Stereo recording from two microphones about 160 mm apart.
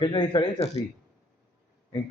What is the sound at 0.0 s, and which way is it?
Speech, 30° left (ahead or behind).